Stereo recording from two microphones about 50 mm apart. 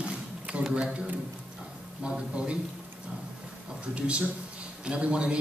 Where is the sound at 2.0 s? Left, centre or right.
Right.